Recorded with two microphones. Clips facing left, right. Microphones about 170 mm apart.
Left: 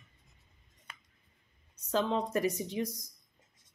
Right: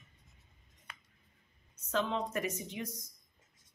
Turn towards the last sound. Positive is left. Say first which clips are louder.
# left 6 dB
turn(degrees=35)  # may be behind; listen again after turning